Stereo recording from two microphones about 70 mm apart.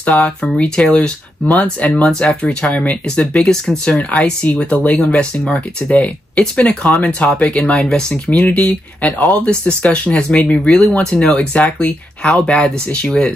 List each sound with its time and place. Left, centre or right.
0.1 s speech: centre
3.3 s speech: centre